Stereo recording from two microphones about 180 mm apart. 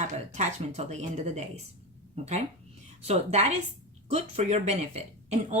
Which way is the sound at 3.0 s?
40° right (ahead or behind).